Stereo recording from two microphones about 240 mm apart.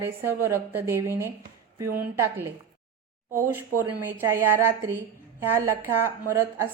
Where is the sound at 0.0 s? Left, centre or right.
Centre.